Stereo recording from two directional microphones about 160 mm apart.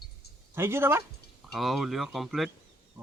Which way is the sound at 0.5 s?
15° right (ahead or behind).